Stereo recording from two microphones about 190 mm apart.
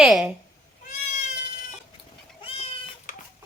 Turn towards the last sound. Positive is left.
turn(degrees=45)  # may be behind; listen again after turning